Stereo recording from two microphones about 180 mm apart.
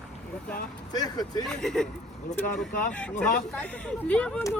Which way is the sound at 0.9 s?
20° left (ahead or behind).